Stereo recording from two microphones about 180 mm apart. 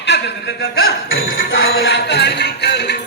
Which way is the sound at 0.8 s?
90° left.